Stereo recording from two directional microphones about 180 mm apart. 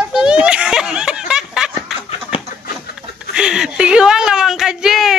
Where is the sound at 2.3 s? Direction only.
30° left (ahead or behind).